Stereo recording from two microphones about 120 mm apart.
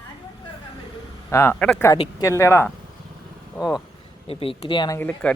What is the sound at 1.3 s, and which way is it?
Speech, 25° left (ahead or behind).